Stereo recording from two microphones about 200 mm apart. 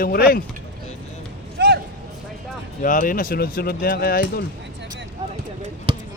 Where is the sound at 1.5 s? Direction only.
55° right (ahead or behind).